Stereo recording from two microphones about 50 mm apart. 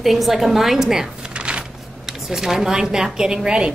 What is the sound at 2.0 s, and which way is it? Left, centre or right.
A woman's voice, centre.